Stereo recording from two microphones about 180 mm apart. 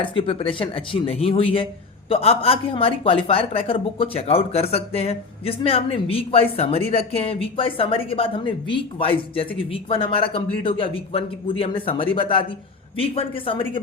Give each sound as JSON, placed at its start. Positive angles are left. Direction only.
{"t": 0.0, "sound": "a woman's voice", "side_deg": 30}